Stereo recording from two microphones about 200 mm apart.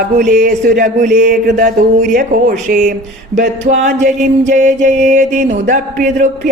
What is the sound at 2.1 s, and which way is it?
Speech, 45° right (ahead or behind).